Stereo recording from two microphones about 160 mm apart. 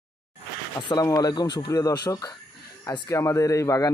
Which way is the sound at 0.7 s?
25° left (ahead or behind).